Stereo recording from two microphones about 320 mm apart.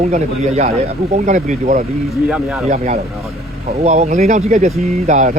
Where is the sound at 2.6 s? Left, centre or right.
Right.